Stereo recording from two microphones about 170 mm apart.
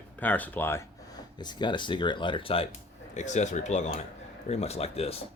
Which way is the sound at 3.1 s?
45° left (ahead or behind).